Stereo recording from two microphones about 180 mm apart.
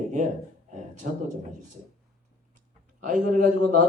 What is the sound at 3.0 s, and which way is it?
Speech, 45° right (ahead or behind).